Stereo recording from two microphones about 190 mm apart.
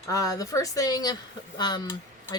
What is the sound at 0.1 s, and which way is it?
Speech, 15° left (ahead or behind).